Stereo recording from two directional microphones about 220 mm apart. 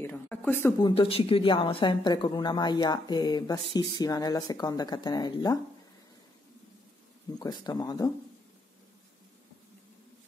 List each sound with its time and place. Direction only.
0.0 s speech: 10° left (ahead or behind)
7.3 s speech: 20° left (ahead or behind)